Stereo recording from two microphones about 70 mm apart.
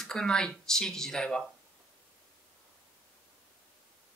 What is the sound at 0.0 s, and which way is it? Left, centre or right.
Speech, centre.